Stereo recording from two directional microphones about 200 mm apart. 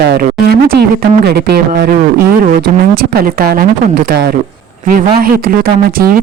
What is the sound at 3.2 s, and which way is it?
Speech, 45° right (ahead or behind).